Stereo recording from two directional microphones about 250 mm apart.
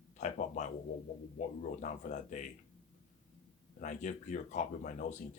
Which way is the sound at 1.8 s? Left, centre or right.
Left.